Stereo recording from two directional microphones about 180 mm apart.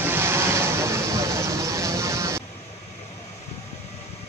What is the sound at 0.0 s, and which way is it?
Vehicle, 10° right (ahead or behind).